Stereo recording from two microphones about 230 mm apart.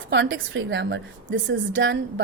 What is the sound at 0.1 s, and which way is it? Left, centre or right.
A woman's voice, right.